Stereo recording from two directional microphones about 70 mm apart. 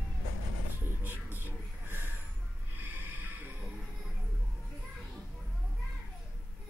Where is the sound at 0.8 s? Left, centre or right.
Right.